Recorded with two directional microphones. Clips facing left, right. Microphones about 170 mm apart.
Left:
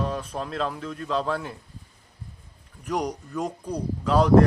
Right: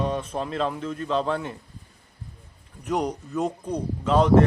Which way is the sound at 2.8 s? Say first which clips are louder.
Right 2 dB; 5° right (ahead or behind).